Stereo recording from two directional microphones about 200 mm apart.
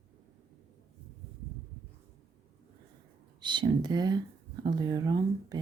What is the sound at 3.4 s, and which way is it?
Speech, 25° right (ahead or behind).